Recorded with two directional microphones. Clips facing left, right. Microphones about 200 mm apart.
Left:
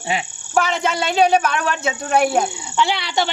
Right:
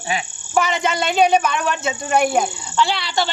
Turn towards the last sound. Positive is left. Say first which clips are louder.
# even
turn(degrees=20)  # may be behind; listen again after turning